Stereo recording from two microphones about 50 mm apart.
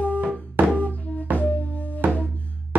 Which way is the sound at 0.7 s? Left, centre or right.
Left.